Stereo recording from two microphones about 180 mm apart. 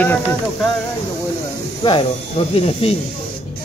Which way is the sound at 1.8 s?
25° left (ahead or behind).